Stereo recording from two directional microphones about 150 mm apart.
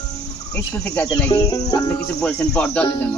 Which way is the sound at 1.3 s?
25° left (ahead or behind).